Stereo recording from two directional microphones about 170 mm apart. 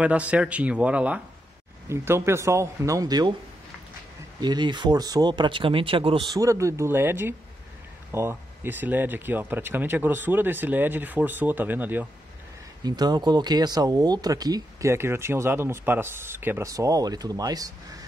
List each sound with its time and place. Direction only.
0.0 s speech: 10° right (ahead or behind); by 3.3 s 25° right (ahead or behind)
4.4 s speech: 25° right (ahead or behind)
6.3 s speech: 20° right (ahead or behind)
12.8 s speech: 25° right (ahead or behind)